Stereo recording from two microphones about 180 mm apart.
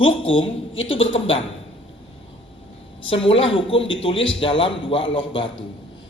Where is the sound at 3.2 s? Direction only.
30° left (ahead or behind).